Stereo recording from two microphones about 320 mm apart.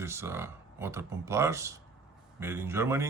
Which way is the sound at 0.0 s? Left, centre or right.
Centre.